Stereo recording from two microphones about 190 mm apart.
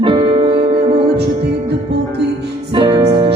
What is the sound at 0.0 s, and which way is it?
Music, 25° right (ahead or behind).